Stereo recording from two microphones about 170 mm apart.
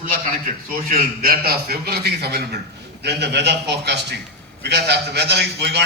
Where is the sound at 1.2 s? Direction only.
60° right (ahead or behind).